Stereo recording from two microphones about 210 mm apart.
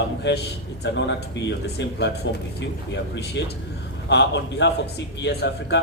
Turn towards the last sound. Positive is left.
turn(degrees=55)  # may be behind; listen again after turning